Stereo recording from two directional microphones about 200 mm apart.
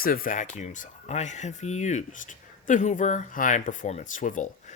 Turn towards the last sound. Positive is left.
turn(degrees=40)  # may be behind; listen again after turning